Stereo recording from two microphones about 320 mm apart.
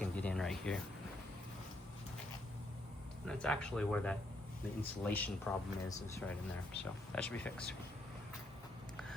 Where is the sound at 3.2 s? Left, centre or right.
Centre.